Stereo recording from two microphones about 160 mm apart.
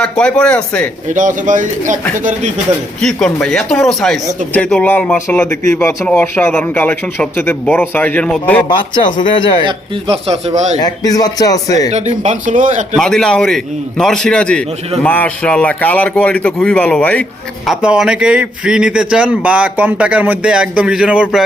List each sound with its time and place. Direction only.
0.0 s a man's voice: 5° left (ahead or behind)
1.0 s speech: 55° right (ahead or behind)
3.0 s a man's voice: 5° left (ahead or behind)
9.0 s speech: 30° left (ahead or behind)
9.6 s speech: 35° right (ahead or behind)
10.8 s speech: 25° left (ahead or behind)
11.9 s speech: 45° right (ahead or behind)
13.0 s a man's voice: 5° left (ahead or behind)
17.7 s a man's voice: 5° right (ahead or behind)